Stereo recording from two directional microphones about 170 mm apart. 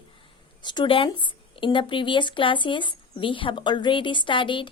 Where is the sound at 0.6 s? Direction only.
25° left (ahead or behind).